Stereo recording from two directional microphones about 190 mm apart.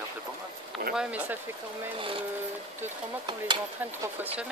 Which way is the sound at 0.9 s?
5° right (ahead or behind).